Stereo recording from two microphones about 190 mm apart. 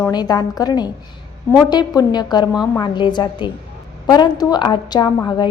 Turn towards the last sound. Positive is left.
turn(degrees=25)  # may be behind; listen again after turning